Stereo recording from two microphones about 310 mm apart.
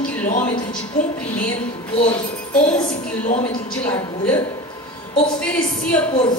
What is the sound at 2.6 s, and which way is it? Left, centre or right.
Music, left.